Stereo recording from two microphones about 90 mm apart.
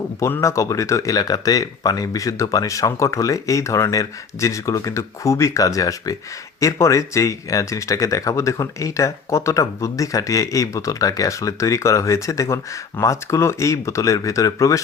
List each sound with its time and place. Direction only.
0.2 s speech: 25° left (ahead or behind)
0.4 s speech: 35° left (ahead or behind)